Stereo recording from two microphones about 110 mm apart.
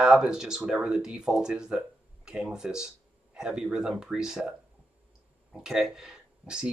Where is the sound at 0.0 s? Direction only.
5° right (ahead or behind).